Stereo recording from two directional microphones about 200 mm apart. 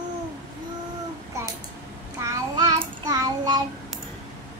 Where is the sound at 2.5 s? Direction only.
20° right (ahead or behind).